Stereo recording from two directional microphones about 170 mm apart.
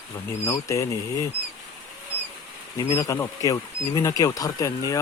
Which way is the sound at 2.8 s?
25° left (ahead or behind).